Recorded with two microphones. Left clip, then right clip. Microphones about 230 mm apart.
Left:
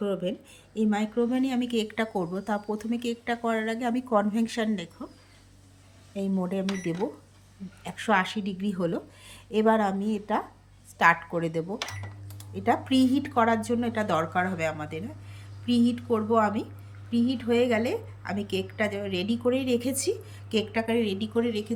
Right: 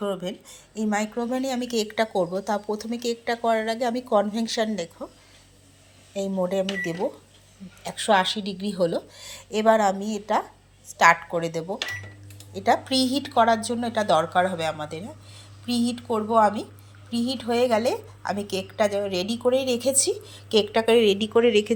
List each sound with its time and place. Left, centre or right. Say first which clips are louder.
0.2 s speech: left 1 dB; centre
6.3 s a woman's voice: right 7 dB; left; by 20.8 s centre
21.0 s speech: right 9 dB; centre